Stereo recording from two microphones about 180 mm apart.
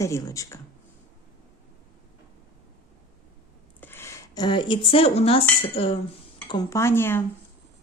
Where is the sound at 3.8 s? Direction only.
10° left (ahead or behind); by 6.0 s 35° left (ahead or behind).